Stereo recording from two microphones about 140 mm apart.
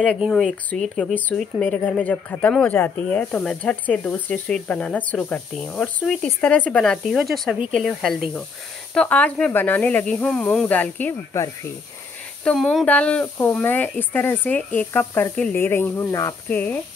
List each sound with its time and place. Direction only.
0.2 s speech: centre (ahead or behind); by 11.5 s 15° left (ahead or behind)
12.4 s speech: 5° left (ahead or behind)